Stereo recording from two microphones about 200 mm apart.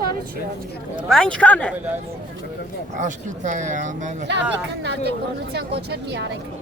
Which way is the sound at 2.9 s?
40° right (ahead or behind).